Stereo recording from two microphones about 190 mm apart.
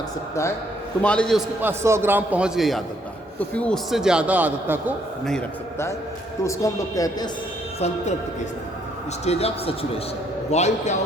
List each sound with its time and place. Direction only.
1.0 s a man's voice: 5° left (ahead or behind)
1.6 s a man's voice: 15° right (ahead or behind)
6.4 s a man's voice: 15° left (ahead or behind)
9.2 s speech: 35° left (ahead or behind)